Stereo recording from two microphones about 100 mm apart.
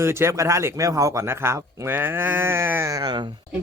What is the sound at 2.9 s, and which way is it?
Speech, 45° right (ahead or behind).